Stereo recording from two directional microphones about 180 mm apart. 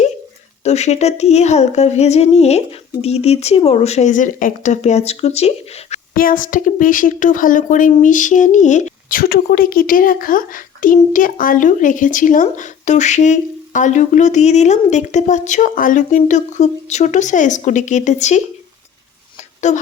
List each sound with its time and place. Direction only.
0.6 s speech: 40° left (ahead or behind)
6.1 s speech: 50° left (ahead or behind)
19.7 s speech: 40° left (ahead or behind)